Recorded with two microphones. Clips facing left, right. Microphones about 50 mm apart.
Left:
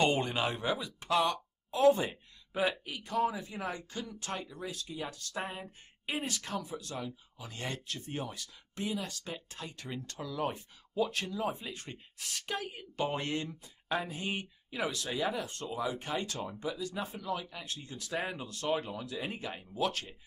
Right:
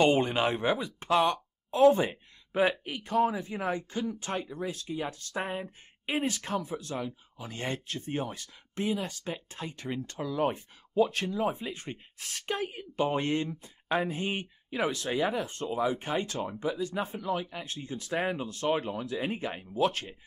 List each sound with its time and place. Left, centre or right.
0.0 s speech: right
12.7 s speech: right